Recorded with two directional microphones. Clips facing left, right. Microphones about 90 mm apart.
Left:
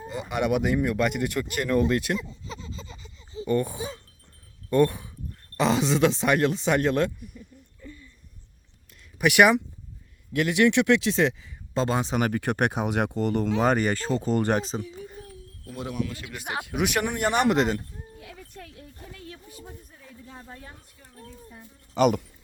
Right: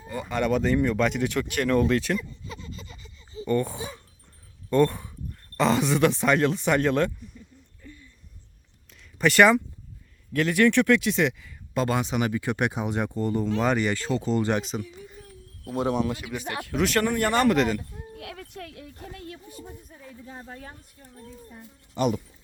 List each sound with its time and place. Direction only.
0.1 s speech: 15° left (ahead or behind)
2.1 s a sound: 25° left (ahead or behind)
3.4 s speech: 15° left (ahead or behind)
9.1 s speech: 15° left (ahead or behind)
12.1 s speech: 45° left (ahead or behind); by 13.5 s 75° left (ahead or behind)
13.6 s speech: 40° left (ahead or behind)
14.6 s speech: 30° left (ahead or behind)
15.6 s speech: 30° right (ahead or behind)
16.6 s speech: 15° left (ahead or behind)
18.2 s speech: 75° right (ahead or behind)
21.9 s speech: 80° left